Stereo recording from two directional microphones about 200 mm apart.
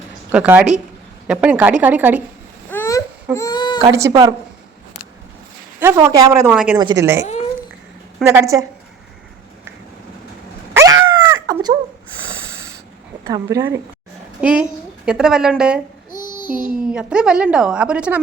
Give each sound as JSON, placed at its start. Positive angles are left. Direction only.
{"t": 0.3, "sound": "speech", "side_deg": -10}
{"t": 2.6, "sound": "babbling", "side_deg": 10}
{"t": 3.3, "sound": "speech", "side_deg": 20}
{"t": 3.8, "sound": "speech", "side_deg": -15}
{"t": 5.8, "sound": "speech", "side_deg": -15}
{"t": 8.3, "sound": "speech", "side_deg": -15}
{"t": 10.8, "sound": "dog", "side_deg": -15}
{"t": 12.2, "sound": "snort", "side_deg": -15}
{"t": 13.2, "sound": "a woman's voice", "side_deg": -20}